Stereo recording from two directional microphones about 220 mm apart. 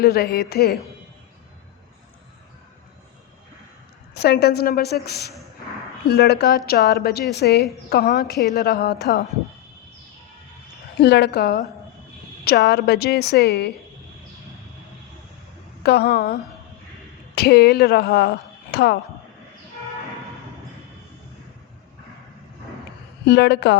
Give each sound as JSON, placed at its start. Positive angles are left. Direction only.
{"t": 0.0, "sound": "a woman's voice", "side_deg": 45}
{"t": 4.1, "sound": "a woman's voice", "side_deg": 45}
{"t": 10.9, "sound": "a woman's voice", "side_deg": 50}
{"t": 15.8, "sound": "a woman's voice", "side_deg": 45}
{"t": 23.2, "sound": "a woman's voice", "side_deg": 50}